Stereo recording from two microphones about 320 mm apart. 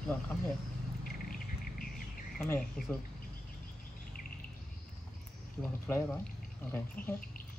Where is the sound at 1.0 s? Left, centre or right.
Left.